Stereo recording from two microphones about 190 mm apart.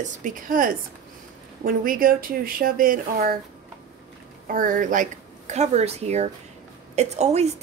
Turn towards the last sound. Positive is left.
turn(degrees=-35)  # may be behind; listen again after turning